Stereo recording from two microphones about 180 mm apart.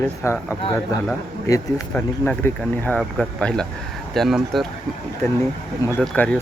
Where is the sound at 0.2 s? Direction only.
15° left (ahead or behind).